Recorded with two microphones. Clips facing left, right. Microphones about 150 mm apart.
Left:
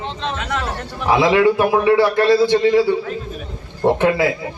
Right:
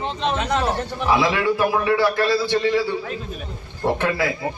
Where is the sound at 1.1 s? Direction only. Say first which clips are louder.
Left 6 dB; 20° left (ahead or behind).